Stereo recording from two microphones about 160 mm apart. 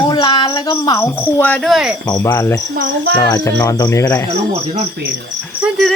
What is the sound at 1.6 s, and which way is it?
Speech, centre (ahead or behind).